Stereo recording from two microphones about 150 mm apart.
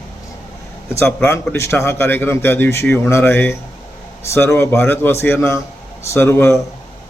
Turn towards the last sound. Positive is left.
turn(degrees=15)  # may be behind; listen again after turning